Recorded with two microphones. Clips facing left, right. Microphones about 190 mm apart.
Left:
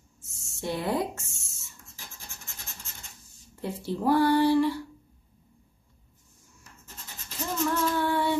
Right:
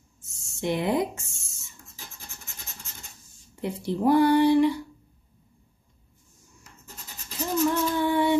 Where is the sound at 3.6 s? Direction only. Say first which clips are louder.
Right 4 dB; 15° right (ahead or behind).